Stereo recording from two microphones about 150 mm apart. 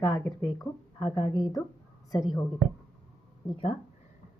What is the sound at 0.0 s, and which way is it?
Speech, 20° left (ahead or behind).